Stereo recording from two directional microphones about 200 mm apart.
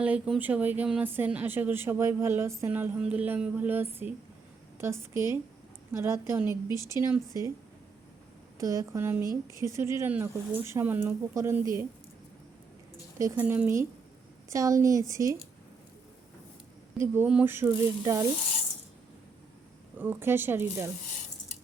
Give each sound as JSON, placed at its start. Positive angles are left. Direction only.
{"t": 0.0, "sound": "speech", "side_deg": -5}
{"t": 8.5, "sound": "speech", "side_deg": -15}
{"t": 13.1, "sound": "speech", "side_deg": -10}
{"t": 17.0, "sound": "speech", "side_deg": -10}
{"t": 20.0, "sound": "speech", "side_deg": -10}